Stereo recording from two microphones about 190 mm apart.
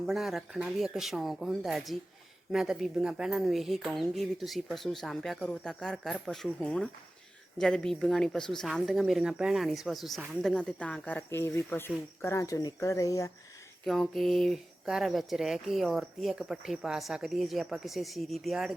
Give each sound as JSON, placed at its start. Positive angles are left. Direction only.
{"t": 0.0, "sound": "speech", "side_deg": 0}
{"t": 13.8, "sound": "speech", "side_deg": 0}